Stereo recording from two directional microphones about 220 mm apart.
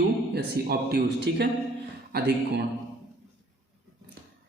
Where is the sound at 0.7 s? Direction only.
50° right (ahead or behind).